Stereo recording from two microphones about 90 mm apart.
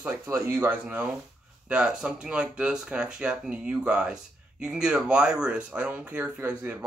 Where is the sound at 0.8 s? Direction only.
15° right (ahead or behind).